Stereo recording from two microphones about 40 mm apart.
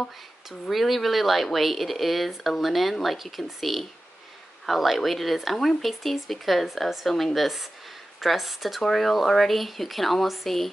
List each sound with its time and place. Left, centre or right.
0.5 s speech: centre